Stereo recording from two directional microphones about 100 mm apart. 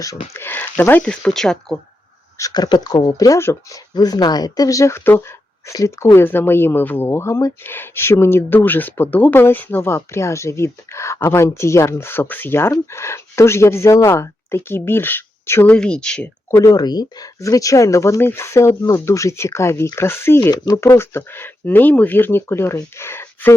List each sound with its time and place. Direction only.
0.3 s speech: 20° left (ahead or behind)
1.1 s speech: 5° left (ahead or behind)
2.4 s speech: 45° left (ahead or behind)
3.4 s speech: 25° left (ahead or behind)
3.9 s speech: 40° left (ahead or behind); by 15.7 s 20° left (ahead or behind)
15.7 s speech: 10° left (ahead or behind)
16.7 s speech: 45° left (ahead or behind); by 20.5 s 25° left (ahead or behind)
20.5 s speech: 35° left (ahead or behind)